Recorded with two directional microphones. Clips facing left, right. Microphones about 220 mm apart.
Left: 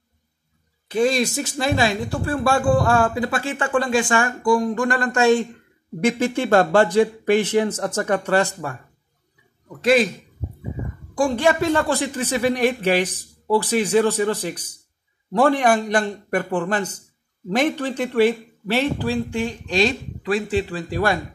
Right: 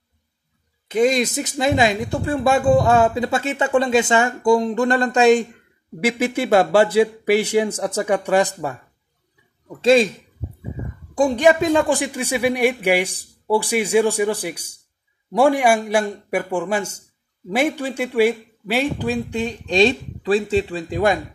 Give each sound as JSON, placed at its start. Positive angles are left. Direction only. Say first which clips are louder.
{"t": 0.8, "sound": "speech", "louder": "right 2 dB", "side_deg": -20}
{"t": 9.8, "sound": "speech", "louder": "right 3 dB", "side_deg": -25}
{"t": 11.1, "sound": "speech", "louder": "right 3 dB", "side_deg": -20}